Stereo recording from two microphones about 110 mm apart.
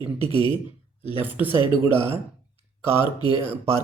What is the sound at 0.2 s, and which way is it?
Speech, 60° right (ahead or behind).